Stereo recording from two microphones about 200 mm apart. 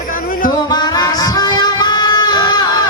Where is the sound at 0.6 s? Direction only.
20° left (ahead or behind).